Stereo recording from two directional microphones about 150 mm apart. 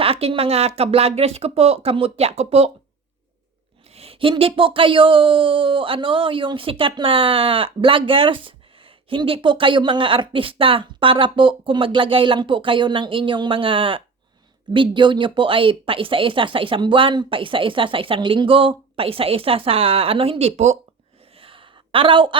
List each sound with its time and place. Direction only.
0.0 s speech: 40° right (ahead or behind)
3.9 s speech: 40° right (ahead or behind)
21.3 s a sound: 35° right (ahead or behind)